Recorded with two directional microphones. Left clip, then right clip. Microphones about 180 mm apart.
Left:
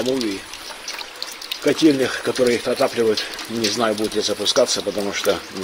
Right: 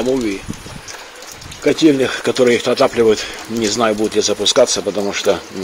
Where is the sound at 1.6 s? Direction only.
25° right (ahead or behind).